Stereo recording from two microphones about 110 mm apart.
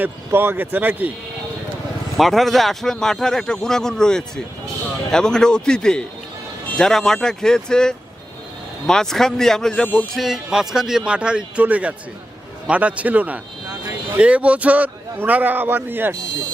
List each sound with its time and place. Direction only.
0.0 s a man's voice: 20° right (ahead or behind)
2.1 s a man's voice: centre (ahead or behind)
10.2 s a man's voice: centre (ahead or behind); by 16.1 s 20° right (ahead or behind)